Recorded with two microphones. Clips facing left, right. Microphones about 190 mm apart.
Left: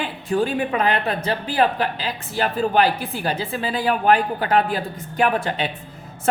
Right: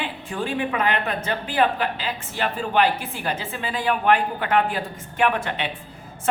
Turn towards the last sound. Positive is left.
turn(degrees=35)  # may be behind; listen again after turning